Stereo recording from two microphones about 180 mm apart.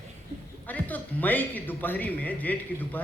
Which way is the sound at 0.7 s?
10° left (ahead or behind).